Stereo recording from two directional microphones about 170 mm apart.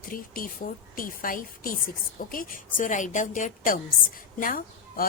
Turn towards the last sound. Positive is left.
turn(degrees=55)  # may be behind; listen again after turning